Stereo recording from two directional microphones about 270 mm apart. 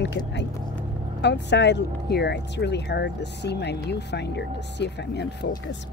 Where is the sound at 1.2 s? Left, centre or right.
Left.